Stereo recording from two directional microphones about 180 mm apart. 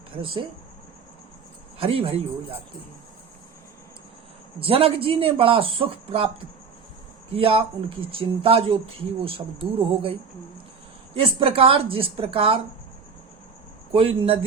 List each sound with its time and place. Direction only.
0.2 s speech: 30° right (ahead or behind)
1.8 s speech: 30° right (ahead or behind)
4.6 s speech: 30° right (ahead or behind)
7.3 s speech: 30° right (ahead or behind)
13.9 s speech: 30° right (ahead or behind)